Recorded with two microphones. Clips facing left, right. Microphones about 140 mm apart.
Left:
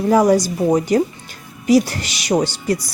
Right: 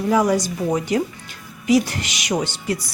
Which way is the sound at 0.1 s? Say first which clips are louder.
Left 5 dB; 40° left (ahead or behind).